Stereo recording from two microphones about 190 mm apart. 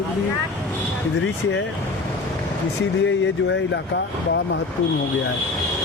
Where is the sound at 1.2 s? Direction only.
70° left (ahead or behind).